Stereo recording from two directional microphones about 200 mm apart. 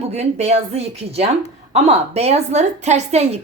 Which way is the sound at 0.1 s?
35° right (ahead or behind).